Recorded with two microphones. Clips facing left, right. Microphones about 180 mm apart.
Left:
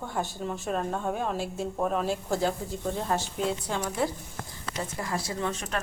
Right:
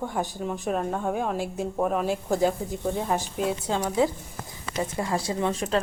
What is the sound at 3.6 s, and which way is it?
Speech, 15° right (ahead or behind).